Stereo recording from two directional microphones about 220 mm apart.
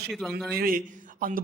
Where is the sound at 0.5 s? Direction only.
40° right (ahead or behind).